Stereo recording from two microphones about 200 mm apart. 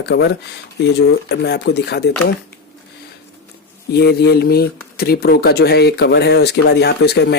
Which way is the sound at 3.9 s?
55° left (ahead or behind).